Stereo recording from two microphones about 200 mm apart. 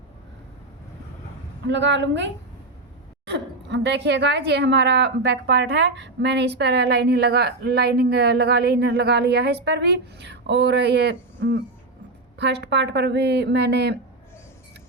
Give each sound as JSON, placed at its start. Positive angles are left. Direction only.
{"t": 1.6, "sound": "a woman's voice", "side_deg": -65}